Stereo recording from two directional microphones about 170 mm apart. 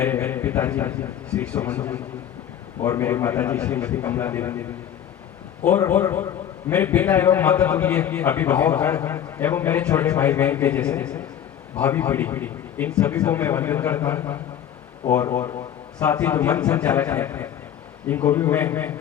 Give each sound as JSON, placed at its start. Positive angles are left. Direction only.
{"t": 0.0, "sound": "a man's voice", "side_deg": 10}